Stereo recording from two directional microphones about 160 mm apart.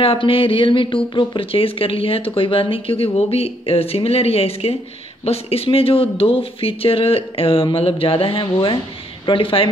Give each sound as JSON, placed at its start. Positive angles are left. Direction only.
{"t": 0.0, "sound": "speech", "side_deg": 35}